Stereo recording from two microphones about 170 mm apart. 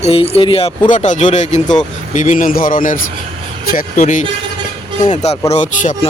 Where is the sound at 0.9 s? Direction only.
45° left (ahead or behind).